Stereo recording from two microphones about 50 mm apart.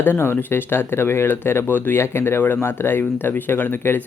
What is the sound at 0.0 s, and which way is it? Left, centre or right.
Speech, left.